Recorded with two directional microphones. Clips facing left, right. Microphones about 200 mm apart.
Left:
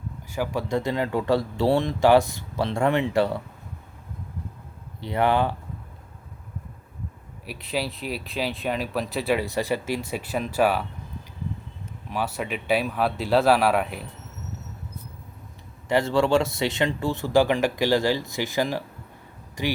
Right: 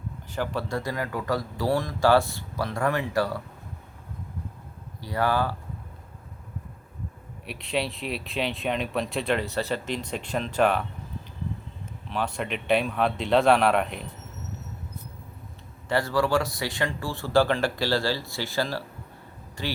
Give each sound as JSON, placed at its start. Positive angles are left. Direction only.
{"t": 0.3, "sound": "speech", "side_deg": 10}
{"t": 0.7, "sound": "speech", "side_deg": 25}
{"t": 4.9, "sound": "speech", "side_deg": 25}
{"t": 7.4, "sound": "speech", "side_deg": 0}
{"t": 12.1, "sound": "speech", "side_deg": 5}
{"t": 15.9, "sound": "speech", "side_deg": 20}